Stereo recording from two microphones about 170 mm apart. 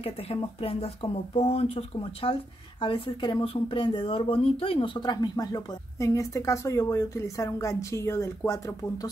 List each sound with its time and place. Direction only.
0.0 s speech: 35° left (ahead or behind)